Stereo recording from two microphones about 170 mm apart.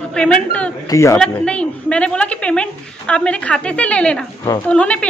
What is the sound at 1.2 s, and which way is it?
A woman's voice, 5° left (ahead or behind).